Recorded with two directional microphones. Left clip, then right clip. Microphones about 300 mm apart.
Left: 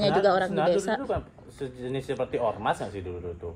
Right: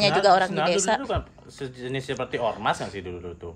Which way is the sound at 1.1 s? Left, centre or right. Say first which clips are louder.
Right 2 dB; right.